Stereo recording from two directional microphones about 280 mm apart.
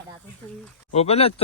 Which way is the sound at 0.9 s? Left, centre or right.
Left.